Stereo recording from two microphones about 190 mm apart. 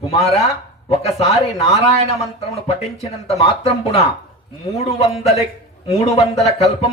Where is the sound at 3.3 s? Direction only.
35° left (ahead or behind).